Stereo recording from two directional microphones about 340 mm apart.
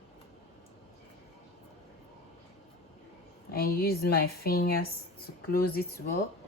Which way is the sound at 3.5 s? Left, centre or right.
Left.